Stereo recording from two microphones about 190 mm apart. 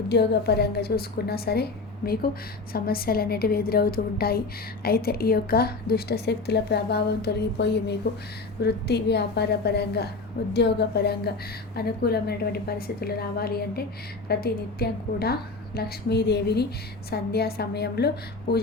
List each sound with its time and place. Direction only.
0.1 s a woman's voice: 60° left (ahead or behind)